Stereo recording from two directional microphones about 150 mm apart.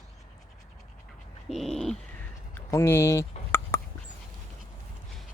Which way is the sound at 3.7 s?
20° left (ahead or behind).